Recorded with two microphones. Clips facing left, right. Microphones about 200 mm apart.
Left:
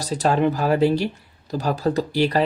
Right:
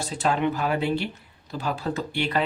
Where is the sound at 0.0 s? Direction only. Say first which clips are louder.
Left 5 dB; 40° left (ahead or behind).